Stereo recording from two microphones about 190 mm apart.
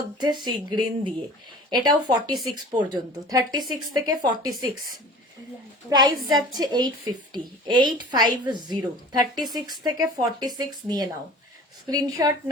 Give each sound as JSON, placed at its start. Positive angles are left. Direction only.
{"t": 0.2, "sound": "a woman's voice", "side_deg": -20}
{"t": 2.3, "sound": "speech", "side_deg": 0}
{"t": 2.7, "sound": "a woman's voice", "side_deg": -20}
{"t": 5.9, "sound": "a woman's voice", "side_deg": -20}